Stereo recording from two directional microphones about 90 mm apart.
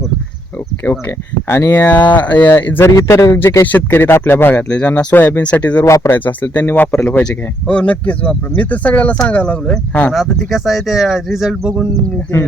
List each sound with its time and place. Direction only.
0.9 s speech: 25° left (ahead or behind)
5.8 s speech: 35° left (ahead or behind)
6.1 s speech: 20° left (ahead or behind)
10.1 s speech: centre (ahead or behind)